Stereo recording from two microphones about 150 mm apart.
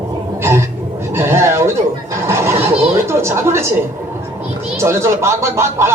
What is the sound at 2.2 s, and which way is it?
Neigh, 15° right (ahead or behind).